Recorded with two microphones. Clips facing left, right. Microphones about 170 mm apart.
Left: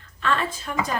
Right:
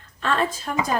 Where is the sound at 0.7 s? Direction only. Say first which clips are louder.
Left 2 dB; 45° right (ahead or behind).